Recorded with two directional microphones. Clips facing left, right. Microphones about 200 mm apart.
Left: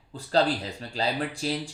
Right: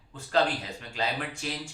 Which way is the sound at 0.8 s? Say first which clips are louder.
Left 4 dB; 35° left (ahead or behind).